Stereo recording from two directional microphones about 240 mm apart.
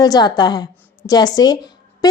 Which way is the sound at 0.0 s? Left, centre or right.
Centre.